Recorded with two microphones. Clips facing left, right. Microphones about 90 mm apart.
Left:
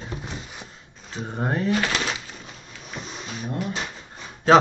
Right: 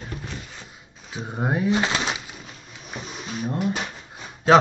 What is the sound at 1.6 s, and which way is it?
Speech, 20° right (ahead or behind).